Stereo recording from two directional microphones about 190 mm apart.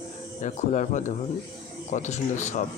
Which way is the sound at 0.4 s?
40° left (ahead or behind).